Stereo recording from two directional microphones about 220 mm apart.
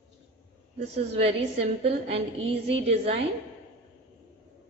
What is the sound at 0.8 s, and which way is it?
A woman's voice, 25° right (ahead or behind).